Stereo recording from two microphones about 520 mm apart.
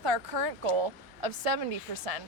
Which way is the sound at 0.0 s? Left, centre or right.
Right.